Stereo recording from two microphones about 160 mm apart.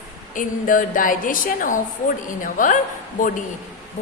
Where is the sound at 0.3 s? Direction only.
55° left (ahead or behind).